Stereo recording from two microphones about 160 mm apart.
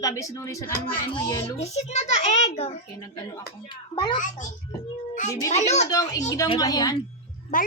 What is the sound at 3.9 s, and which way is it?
Speech, 30° left (ahead or behind).